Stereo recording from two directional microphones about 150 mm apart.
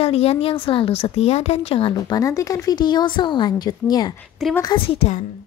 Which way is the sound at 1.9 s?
25° left (ahead or behind).